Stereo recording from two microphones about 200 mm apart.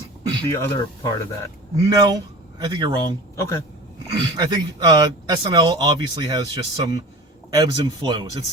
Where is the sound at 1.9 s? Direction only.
20° right (ahead or behind).